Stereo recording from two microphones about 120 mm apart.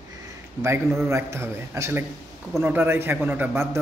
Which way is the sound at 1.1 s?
25° right (ahead or behind).